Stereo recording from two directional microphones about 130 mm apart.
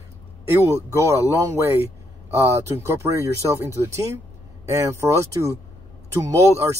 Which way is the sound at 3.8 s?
20° right (ahead or behind).